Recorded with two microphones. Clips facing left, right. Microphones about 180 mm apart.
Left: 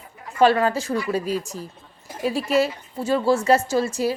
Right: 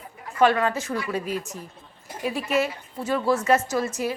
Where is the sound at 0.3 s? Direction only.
30° left (ahead or behind).